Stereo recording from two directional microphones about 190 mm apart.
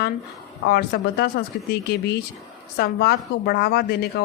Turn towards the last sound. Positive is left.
turn(degrees=55)  # may be behind; listen again after turning